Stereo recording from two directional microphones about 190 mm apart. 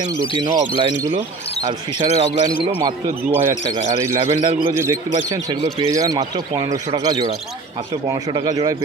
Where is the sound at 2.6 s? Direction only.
25° right (ahead or behind).